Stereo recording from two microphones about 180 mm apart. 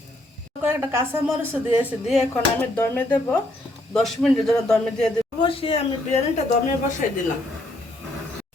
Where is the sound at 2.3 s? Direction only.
10° left (ahead or behind).